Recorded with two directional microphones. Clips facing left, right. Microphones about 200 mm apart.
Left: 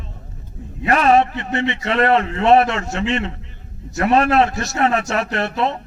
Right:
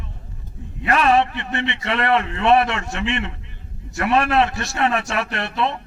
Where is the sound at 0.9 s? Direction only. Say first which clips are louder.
Left 3 dB; 25° left (ahead or behind).